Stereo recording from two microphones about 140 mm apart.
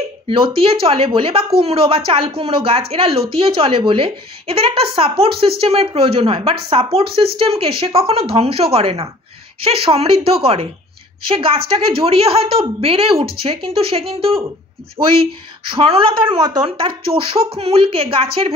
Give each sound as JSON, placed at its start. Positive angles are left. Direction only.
{"t": 0.3, "sound": "speech", "side_deg": -40}
{"t": 15.0, "sound": "speech", "side_deg": -25}
{"t": 15.7, "sound": "speech", "side_deg": -40}